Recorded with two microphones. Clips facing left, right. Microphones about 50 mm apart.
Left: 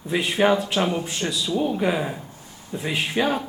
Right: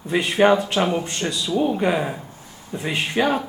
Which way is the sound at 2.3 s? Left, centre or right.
Right.